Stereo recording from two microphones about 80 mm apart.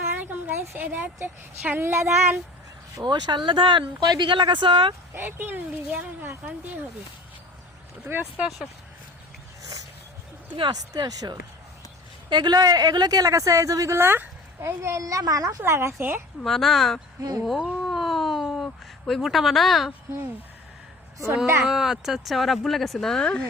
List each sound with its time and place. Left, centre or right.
0.1 s a woman's voice: right
3.0 s speech: right
4.0 s speech: right
5.1 s speech: right
8.1 s speech: right
10.5 s speech: right
10.9 s a woman's voice: right
12.3 s a woman's voice: right
16.0 s speech: right
16.4 s speech: centre
17.8 s a sound: centre
21.6 s speech: centre